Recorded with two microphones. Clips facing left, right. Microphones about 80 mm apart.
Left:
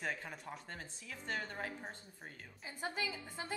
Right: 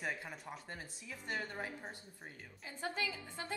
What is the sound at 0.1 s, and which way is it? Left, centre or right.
A woman's voice, centre.